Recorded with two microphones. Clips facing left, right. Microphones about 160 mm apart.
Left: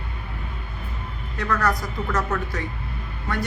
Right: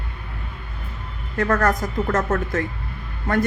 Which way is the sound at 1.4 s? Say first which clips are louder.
Right 4 dB; 50° right (ahead or behind).